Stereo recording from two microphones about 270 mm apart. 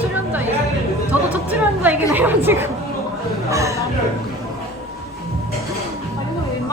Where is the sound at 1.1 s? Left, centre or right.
Centre.